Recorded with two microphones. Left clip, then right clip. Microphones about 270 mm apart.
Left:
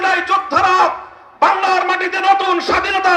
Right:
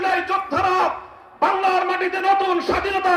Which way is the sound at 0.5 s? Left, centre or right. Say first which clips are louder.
Left 7 dB; left.